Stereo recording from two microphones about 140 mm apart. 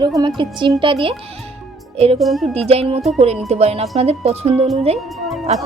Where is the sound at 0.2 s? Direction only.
30° right (ahead or behind).